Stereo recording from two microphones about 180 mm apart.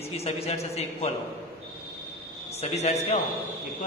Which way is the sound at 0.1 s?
35° left (ahead or behind).